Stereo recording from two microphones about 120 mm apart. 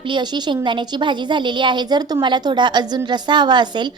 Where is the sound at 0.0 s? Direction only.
40° right (ahead or behind).